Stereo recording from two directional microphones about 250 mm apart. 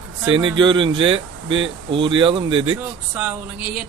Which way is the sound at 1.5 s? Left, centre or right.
Right.